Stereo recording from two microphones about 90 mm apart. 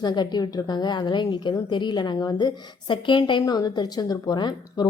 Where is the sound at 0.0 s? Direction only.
55° left (ahead or behind).